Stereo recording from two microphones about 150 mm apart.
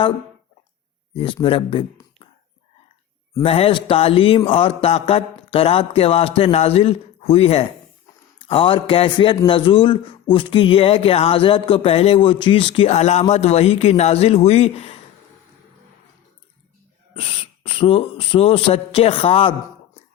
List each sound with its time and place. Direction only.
1.1 s speech: 35° left (ahead or behind)
3.4 s speech: 40° left (ahead or behind)
17.2 s speech: 40° left (ahead or behind)